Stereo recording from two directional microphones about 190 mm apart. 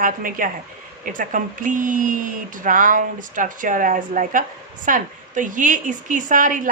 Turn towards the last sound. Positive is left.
turn(degrees=-45)  # may be behind; listen again after turning